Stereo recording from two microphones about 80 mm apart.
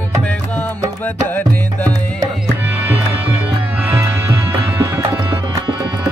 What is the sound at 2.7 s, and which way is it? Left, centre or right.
Music, right.